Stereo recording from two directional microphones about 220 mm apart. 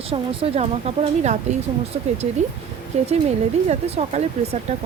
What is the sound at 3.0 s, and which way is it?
Speech, 30° right (ahead or behind).